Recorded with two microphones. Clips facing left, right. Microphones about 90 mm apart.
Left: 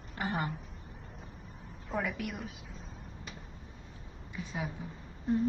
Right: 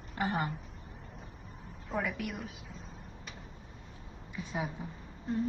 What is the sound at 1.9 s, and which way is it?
Speech, centre (ahead or behind).